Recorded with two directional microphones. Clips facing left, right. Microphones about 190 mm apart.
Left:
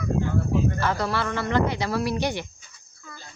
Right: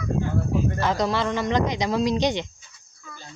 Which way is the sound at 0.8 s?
15° right (ahead or behind).